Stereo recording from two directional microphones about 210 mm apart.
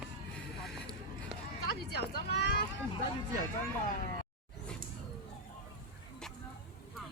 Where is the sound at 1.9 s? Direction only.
50° left (ahead or behind).